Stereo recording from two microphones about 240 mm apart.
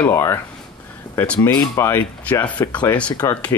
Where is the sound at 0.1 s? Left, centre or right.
Centre.